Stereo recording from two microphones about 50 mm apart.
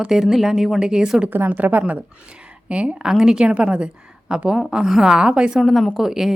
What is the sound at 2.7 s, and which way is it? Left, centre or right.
Speech, right.